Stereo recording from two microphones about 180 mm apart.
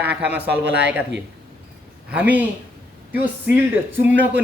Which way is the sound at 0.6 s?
75° right (ahead or behind).